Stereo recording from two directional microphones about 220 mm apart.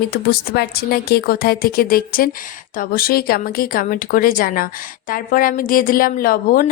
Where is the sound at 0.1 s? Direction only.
45° left (ahead or behind).